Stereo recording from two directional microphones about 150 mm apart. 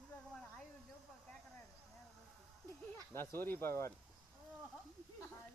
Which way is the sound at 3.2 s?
15° left (ahead or behind).